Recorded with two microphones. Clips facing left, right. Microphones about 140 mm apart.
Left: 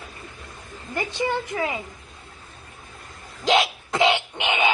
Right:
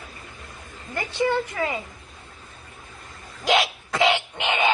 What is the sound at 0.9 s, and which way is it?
Speech, 15° left (ahead or behind).